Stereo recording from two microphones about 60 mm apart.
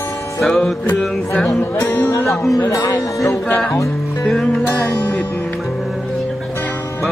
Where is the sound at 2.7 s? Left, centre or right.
Left.